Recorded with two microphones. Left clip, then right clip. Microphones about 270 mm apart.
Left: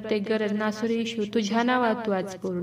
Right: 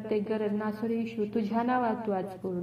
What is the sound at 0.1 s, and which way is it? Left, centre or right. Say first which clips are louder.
Speech: left 4 dB; left.